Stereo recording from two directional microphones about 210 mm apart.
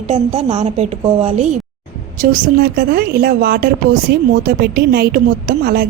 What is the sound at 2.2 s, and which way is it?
A woman's voice, 40° right (ahead or behind).